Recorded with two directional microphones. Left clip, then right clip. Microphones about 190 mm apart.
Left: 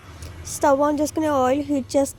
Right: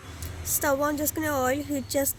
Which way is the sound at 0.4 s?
30° left (ahead or behind).